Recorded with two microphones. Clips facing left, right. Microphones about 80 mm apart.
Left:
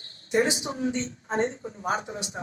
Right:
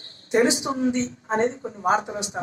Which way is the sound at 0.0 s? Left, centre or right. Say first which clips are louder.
Right 3 dB; right.